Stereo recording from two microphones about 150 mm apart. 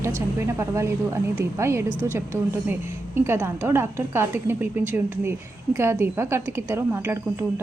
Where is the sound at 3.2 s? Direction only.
15° right (ahead or behind).